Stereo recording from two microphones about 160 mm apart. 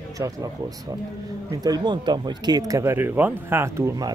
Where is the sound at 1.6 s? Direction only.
25° right (ahead or behind).